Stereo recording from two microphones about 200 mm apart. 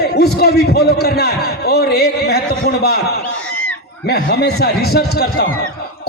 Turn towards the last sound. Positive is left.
turn(degrees=50)  # may be behind; listen again after turning